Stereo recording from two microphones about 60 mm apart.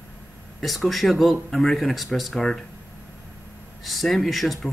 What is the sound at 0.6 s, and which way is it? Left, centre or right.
Speech, centre.